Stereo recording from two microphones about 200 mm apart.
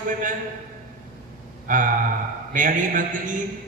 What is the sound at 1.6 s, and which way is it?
A man's voice, 40° right (ahead or behind).